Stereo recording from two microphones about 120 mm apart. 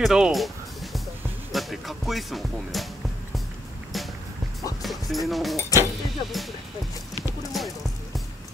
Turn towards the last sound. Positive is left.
turn(degrees=0)  # may be behind; listen again after turning